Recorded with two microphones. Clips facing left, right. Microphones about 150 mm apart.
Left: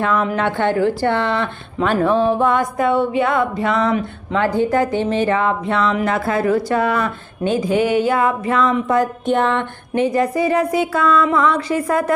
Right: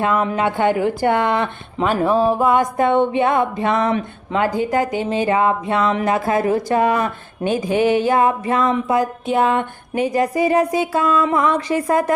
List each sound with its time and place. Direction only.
0.0 s speech: 15° right (ahead or behind)
1.8 s speech: 5° right (ahead or behind)
2.7 s speech: 25° right (ahead or behind)